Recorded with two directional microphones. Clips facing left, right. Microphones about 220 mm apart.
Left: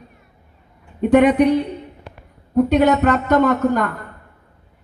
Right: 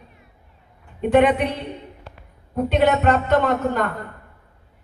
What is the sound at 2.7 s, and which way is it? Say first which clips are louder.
Music: left 1 dB; 40° left (ahead or behind).